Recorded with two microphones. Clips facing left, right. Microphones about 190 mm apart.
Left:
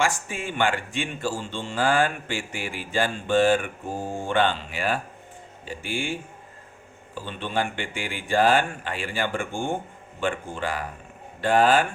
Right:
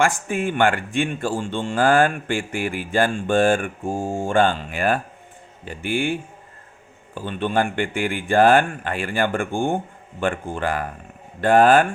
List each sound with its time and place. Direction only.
0.0 s speech: 55° right (ahead or behind)